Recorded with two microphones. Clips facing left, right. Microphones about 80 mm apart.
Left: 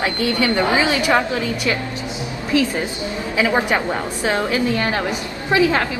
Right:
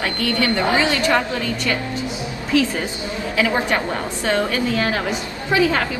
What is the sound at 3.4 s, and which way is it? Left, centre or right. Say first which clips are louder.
A woman's voice: left 2 dB; centre.